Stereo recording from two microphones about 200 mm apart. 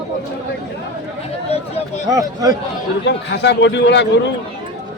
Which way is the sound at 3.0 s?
60° left (ahead or behind).